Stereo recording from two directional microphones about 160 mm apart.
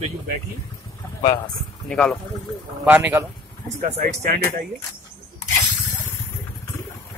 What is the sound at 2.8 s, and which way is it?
Speech, 10° right (ahead or behind).